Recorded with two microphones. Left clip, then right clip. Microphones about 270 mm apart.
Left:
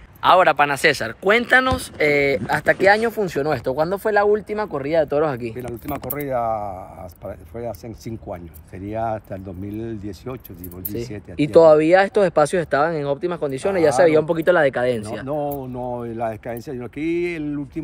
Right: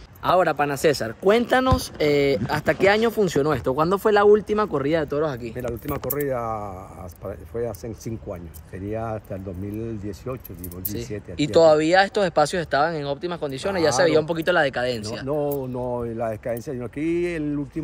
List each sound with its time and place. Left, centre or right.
0.2 s speech: centre
10.9 s speech: left
15.2 s speech: centre